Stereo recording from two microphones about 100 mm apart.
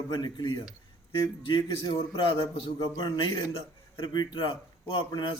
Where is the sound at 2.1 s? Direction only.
55° left (ahead or behind).